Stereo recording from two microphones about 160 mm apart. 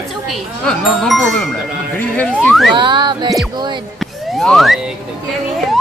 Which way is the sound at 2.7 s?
30° right (ahead or behind).